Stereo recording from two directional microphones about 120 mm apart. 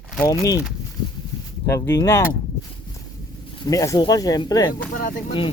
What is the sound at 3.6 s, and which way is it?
Speech, 30° left (ahead or behind).